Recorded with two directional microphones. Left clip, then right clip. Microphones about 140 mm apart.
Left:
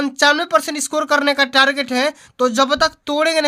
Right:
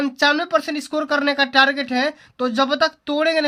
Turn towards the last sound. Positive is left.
turn(degrees=40)  # may be behind; listen again after turning